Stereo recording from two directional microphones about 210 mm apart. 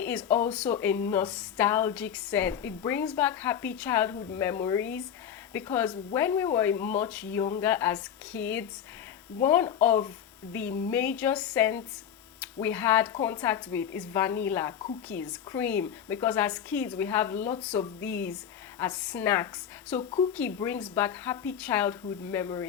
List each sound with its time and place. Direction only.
0.0 s a woman's voice: 5° left (ahead or behind)
20.0 s speech: 25° left (ahead or behind)
20.3 s a woman's voice: 10° left (ahead or behind)